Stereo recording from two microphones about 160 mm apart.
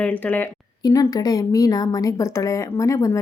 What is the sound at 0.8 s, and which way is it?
Speech, 20° left (ahead or behind).